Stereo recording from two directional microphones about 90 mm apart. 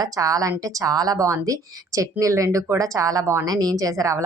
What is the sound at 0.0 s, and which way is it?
A woman's voice, 40° right (ahead or behind).